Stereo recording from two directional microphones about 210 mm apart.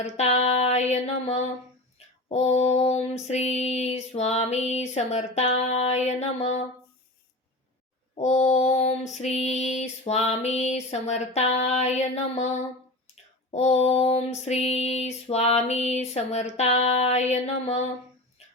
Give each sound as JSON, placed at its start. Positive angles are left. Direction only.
{"t": 0.0, "sound": "female singing", "side_deg": 30}
{"t": 8.1, "sound": "female singing", "side_deg": 35}
{"t": 13.5, "sound": "female singing", "side_deg": 30}